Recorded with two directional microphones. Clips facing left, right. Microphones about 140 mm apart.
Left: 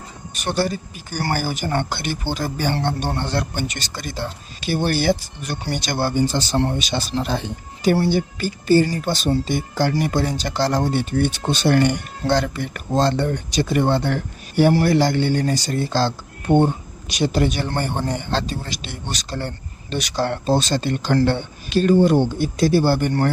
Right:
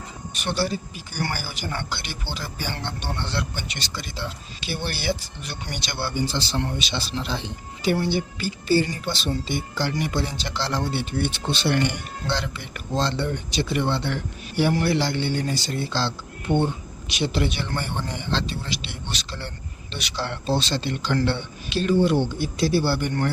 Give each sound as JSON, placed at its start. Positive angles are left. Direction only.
{"t": 0.3, "sound": "speech", "side_deg": 45}